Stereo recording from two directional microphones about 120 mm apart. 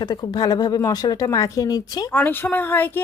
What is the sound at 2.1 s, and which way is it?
Speech, 15° left (ahead or behind).